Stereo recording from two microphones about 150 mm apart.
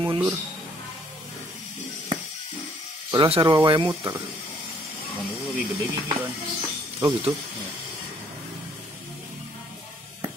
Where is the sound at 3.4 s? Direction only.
30° right (ahead or behind).